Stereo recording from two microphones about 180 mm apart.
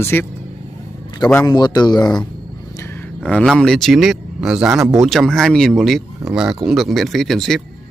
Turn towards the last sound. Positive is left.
turn(degrees=0)  # may be behind; listen again after turning